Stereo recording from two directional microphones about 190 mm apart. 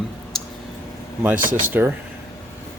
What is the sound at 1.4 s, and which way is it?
Speech, 45° right (ahead or behind).